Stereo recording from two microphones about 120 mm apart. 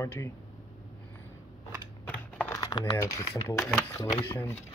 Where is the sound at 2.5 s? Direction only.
25° left (ahead or behind).